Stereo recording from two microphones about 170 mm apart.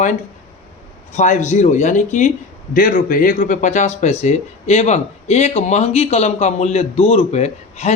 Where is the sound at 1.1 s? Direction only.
45° left (ahead or behind).